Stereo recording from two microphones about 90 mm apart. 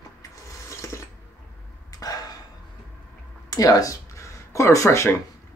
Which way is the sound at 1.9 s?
45° left (ahead or behind).